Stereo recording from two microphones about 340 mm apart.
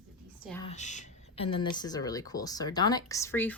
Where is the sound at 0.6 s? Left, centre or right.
Centre.